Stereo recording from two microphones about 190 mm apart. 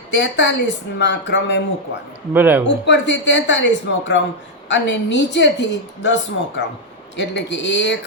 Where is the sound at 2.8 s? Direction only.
70° left (ahead or behind).